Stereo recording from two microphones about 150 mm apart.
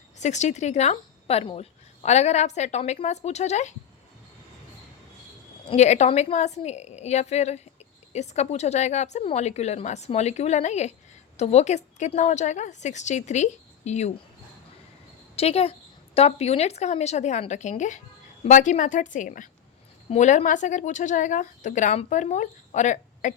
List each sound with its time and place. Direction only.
0.2 s speech: 50° left (ahead or behind)
5.6 s speech: 50° left (ahead or behind)
15.4 s a woman's voice: 40° left (ahead or behind)